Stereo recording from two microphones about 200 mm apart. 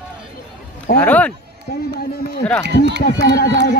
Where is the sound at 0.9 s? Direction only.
5° left (ahead or behind).